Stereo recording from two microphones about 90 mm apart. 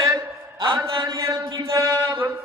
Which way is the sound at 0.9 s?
65° right (ahead or behind).